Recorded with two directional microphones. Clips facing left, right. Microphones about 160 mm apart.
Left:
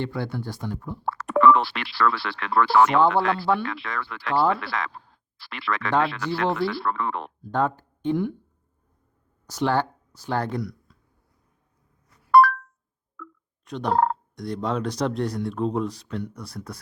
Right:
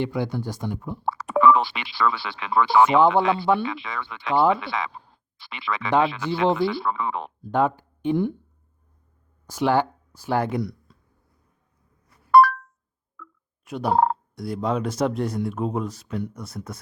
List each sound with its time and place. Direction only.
0.0 s speech: 15° right (ahead or behind)
1.0 s turkey: centre (ahead or behind)
4.9 s a sound: 20° right (ahead or behind)
5.4 s turkey: centre (ahead or behind)
7.5 s speech: 15° right (ahead or behind)
8.1 s speech: 25° right (ahead or behind)
9.5 s speech: 10° right (ahead or behind)
10.6 s a sound: 30° right (ahead or behind)
12.4 s a sound: 5° right (ahead or behind)
13.7 s turkey: 5° right (ahead or behind)